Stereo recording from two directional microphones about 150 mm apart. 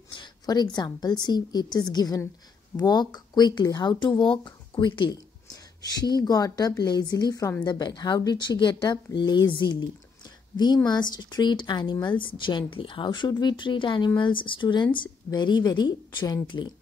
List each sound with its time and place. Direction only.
0.1 s a woman's voice: 30° left (ahead or behind)